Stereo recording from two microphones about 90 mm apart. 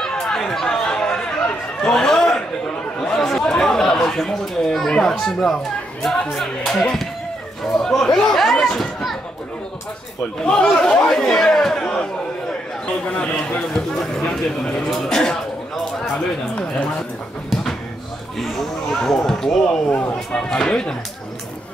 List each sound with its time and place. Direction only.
0.0 s chatter: 5° left (ahead or behind)
6.3 s speech: 5° left (ahead or behind)
7.7 s chatter: 5° left (ahead or behind)
10.4 s speech: 10° left (ahead or behind)
14.9 s a sound: 5° left (ahead or behind)
18.4 s speech: centre (ahead or behind)
19.9 s speech: 15° left (ahead or behind)